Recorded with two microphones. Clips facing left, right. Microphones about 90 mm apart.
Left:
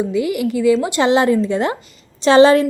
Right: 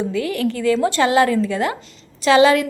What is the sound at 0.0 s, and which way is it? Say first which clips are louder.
A woman's voice: left 2 dB; 15° left (ahead or behind).